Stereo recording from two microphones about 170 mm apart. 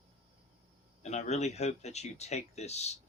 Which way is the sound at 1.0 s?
40° left (ahead or behind).